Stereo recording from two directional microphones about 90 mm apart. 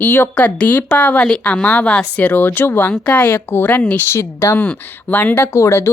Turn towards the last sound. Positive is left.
turn(degrees=30)  # may be behind; listen again after turning